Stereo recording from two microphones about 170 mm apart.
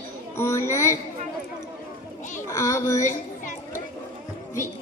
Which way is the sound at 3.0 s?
50° left (ahead or behind).